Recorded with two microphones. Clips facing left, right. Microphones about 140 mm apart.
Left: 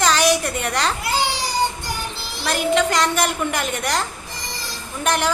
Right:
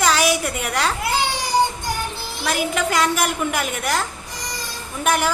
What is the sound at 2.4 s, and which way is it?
A woman's voice, 10° right (ahead or behind).